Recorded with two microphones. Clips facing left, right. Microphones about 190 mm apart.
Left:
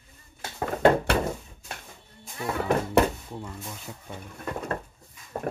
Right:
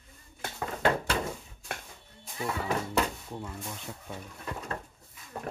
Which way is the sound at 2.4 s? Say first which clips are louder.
Left 5 dB; 60° left (ahead or behind).